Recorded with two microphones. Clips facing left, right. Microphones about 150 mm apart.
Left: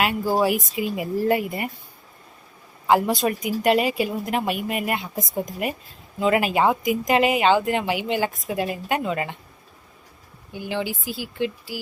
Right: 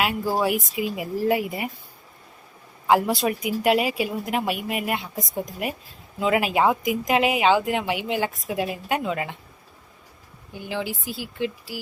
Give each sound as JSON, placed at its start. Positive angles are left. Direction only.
{"t": 0.0, "sound": "speech", "side_deg": 0}
{"t": 2.8, "sound": "speech", "side_deg": -5}
{"t": 10.5, "sound": "speech", "side_deg": 0}